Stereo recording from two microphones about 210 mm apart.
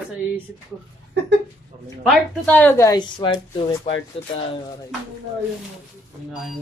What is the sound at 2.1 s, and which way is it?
Speech, 5° left (ahead or behind).